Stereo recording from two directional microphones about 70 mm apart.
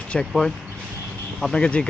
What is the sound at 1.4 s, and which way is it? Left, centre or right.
Speech, centre.